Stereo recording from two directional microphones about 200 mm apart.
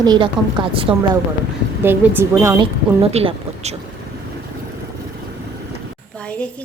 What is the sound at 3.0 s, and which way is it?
Speech, 30° right (ahead or behind).